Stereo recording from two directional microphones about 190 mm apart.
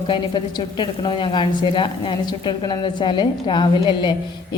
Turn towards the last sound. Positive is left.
turn(degrees=25)  # may be behind; listen again after turning